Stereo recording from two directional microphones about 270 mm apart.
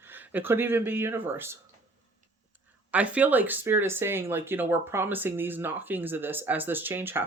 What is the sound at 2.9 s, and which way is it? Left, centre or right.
Speech, centre.